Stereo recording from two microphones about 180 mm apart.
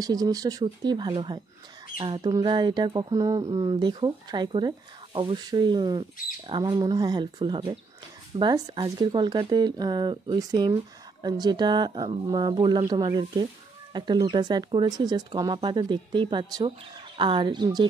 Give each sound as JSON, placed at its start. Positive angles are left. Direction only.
{"t": 0.0, "sound": "speech", "side_deg": -20}